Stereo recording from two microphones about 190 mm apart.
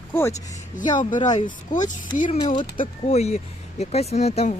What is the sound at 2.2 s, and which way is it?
Speech, 30° left (ahead or behind).